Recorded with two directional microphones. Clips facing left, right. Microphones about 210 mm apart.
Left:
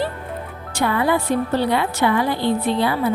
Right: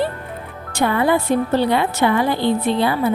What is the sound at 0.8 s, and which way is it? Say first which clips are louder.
A woman's voice: right 2 dB; 25° right (ahead or behind).